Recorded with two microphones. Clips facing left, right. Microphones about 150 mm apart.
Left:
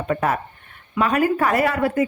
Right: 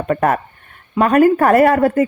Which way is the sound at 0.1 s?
55° right (ahead or behind).